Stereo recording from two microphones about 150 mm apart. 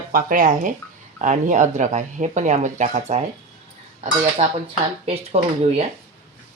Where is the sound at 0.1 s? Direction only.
70° right (ahead or behind); by 3.2 s 45° right (ahead or behind).